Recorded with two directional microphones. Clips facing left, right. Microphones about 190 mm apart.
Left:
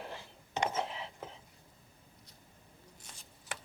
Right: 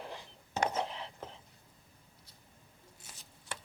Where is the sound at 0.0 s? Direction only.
Centre (ahead or behind).